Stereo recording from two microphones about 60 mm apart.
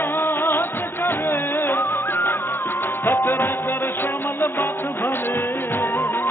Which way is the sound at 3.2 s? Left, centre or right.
Left.